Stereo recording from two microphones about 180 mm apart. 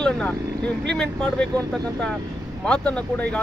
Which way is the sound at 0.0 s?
5° left (ahead or behind).